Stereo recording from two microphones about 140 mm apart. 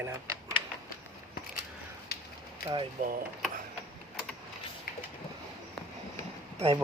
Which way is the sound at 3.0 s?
65° right (ahead or behind).